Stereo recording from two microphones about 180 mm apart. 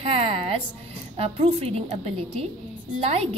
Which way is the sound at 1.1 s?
35° right (ahead or behind).